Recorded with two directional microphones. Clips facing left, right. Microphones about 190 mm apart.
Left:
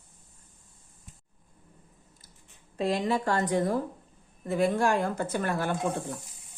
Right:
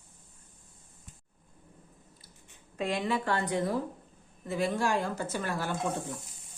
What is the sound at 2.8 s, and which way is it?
A woman's voice, 35° left (ahead or behind).